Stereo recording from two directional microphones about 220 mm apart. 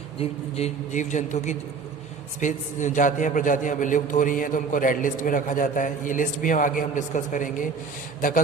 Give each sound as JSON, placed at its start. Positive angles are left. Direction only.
{"t": 0.2, "sound": "a man's voice", "side_deg": 30}